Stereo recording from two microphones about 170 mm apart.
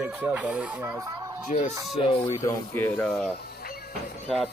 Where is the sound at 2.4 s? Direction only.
10° left (ahead or behind).